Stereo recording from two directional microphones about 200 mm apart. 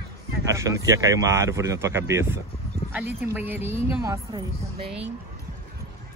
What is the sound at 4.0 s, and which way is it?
Speech, 20° right (ahead or behind).